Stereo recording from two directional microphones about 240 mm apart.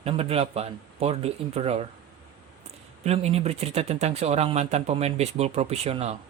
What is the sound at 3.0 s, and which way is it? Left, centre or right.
Speech, right.